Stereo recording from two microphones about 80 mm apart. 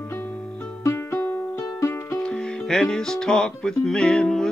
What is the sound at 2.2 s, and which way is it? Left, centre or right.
Music, centre.